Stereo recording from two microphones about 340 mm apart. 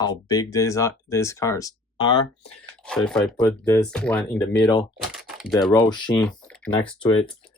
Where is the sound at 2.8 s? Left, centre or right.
Centre.